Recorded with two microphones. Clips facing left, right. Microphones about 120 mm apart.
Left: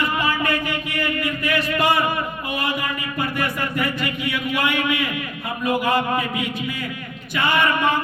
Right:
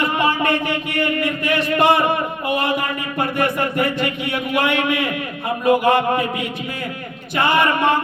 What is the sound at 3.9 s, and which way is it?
Mantra, 60° right (ahead or behind).